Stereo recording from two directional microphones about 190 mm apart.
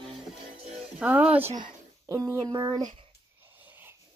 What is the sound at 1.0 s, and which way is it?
Speech, 5° right (ahead or behind).